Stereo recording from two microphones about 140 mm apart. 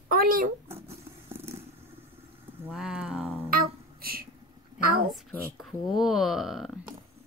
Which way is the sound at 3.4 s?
90° right.